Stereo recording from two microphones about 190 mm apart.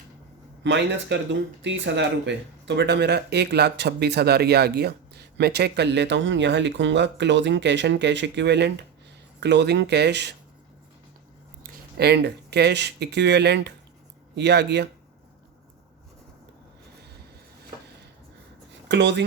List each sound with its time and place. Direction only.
0.6 s speech: 70° right (ahead or behind)
11.6 s speech: 55° right (ahead or behind)
18.9 s speech: 65° right (ahead or behind)